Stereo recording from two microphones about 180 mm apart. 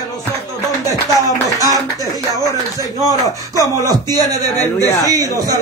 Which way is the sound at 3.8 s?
20° right (ahead or behind).